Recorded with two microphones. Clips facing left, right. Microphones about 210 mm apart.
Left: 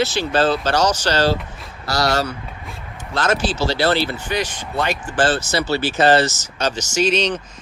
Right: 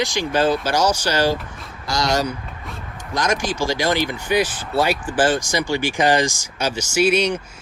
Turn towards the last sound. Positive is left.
turn(degrees=-10)  # may be behind; listen again after turning